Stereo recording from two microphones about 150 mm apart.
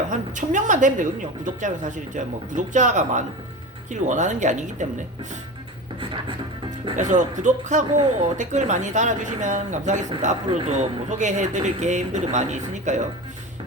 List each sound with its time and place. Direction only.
0.3 s a woman's voice: 55° right (ahead or behind)
6.0 s speech: 35° right (ahead or behind)
6.9 s a woman's voice: 55° right (ahead or behind)